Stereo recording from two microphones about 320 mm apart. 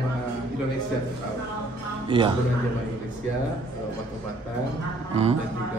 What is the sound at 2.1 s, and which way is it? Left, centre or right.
Speech, centre.